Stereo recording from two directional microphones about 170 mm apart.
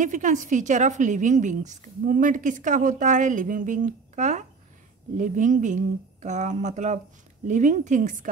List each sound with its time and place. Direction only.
0.0 s a woman's voice: 45° right (ahead or behind)